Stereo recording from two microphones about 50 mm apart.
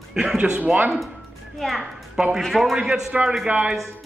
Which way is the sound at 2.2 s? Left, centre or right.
Centre.